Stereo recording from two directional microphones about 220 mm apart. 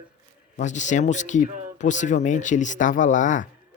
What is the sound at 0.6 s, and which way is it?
Speech, 35° left (ahead or behind).